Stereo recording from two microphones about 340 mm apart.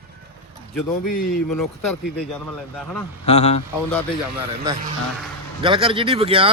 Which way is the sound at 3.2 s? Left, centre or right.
Centre.